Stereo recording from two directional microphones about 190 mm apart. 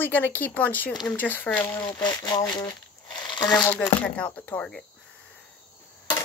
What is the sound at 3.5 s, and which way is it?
Speech, 10° left (ahead or behind).